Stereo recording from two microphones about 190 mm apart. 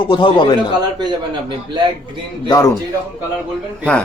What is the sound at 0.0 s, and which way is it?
Speech, 25° left (ahead or behind).